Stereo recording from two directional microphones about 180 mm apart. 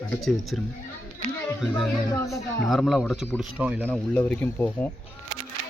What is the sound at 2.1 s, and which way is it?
Speech, 15° left (ahead or behind).